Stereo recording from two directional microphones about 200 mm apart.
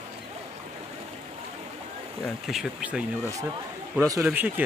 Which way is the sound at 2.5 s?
5° right (ahead or behind).